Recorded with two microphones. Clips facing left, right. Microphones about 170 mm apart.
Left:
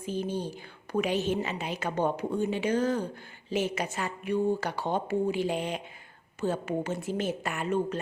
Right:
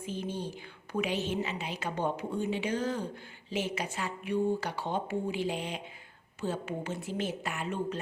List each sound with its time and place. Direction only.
0.0 s a woman's voice: 40° left (ahead or behind)